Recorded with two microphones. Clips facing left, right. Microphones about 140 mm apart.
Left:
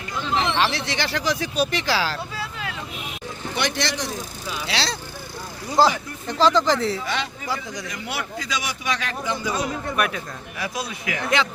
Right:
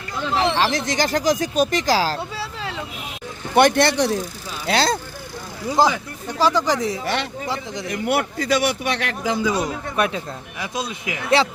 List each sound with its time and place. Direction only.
0.5 s speech: 40° right (ahead or behind)
2.1 s vehicle: 30° right (ahead or behind)
3.5 s a man's voice: 55° right (ahead or behind)
4.6 s speech: 50° right (ahead or behind)
5.7 s speech: 15° right (ahead or behind)
7.0 s a man's voice: 60° right (ahead or behind)
7.4 s speech: 25° right (ahead or behind)
7.9 s a man's voice: 55° right (ahead or behind)
9.9 s speech: 25° right (ahead or behind)